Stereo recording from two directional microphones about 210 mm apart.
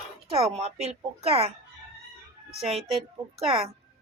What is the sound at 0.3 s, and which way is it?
Speech, 30° right (ahead or behind).